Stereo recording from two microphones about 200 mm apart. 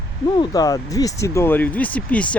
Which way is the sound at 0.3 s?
20° left (ahead or behind).